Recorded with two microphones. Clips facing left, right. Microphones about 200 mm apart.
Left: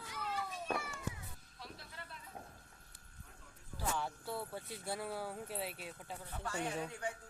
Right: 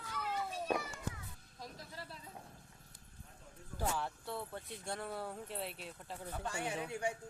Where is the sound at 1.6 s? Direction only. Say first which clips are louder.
Right 3 dB; 35° right (ahead or behind).